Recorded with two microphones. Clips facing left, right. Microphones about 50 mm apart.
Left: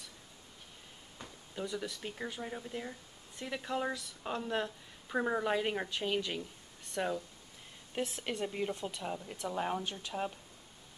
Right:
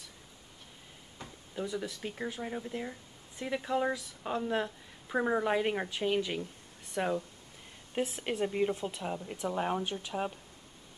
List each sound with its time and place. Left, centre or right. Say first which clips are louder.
1.5 s speech: right 3 dB; centre